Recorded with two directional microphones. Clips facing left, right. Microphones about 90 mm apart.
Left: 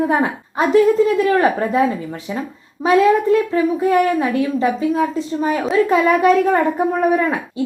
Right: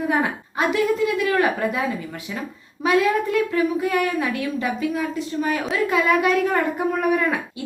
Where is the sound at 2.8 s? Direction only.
30° left (ahead or behind).